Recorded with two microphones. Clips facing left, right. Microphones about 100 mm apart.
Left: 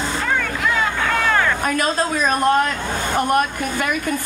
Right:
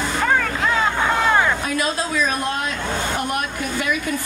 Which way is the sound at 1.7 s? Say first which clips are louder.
Left 2 dB; 50° left (ahead or behind).